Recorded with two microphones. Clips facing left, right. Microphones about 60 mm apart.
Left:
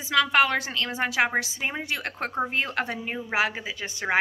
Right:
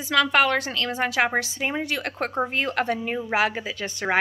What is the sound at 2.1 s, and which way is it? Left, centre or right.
A woman's voice, centre.